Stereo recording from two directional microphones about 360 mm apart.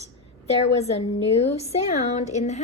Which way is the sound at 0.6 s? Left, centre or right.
Centre.